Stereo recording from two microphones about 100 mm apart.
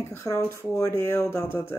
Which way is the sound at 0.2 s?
30° left (ahead or behind).